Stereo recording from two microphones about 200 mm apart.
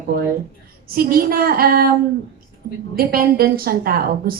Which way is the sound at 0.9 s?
50° right (ahead or behind).